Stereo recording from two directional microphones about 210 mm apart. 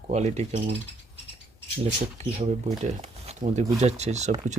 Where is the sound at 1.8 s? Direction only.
30° right (ahead or behind).